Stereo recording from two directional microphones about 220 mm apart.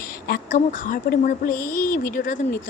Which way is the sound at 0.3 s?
40° left (ahead or behind).